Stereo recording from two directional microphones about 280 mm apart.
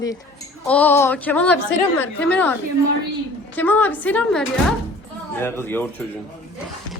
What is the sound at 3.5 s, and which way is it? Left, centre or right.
A woman's voice, centre.